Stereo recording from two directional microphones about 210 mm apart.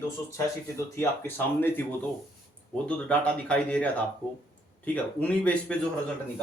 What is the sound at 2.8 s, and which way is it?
Speech, 5° left (ahead or behind).